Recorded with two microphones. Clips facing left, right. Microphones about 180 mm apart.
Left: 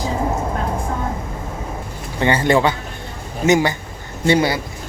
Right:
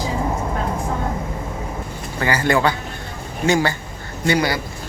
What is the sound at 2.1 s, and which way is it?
A man's voice, 25° left (ahead or behind).